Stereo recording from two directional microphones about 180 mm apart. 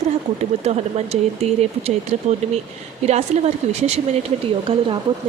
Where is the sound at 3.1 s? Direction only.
40° right (ahead or behind).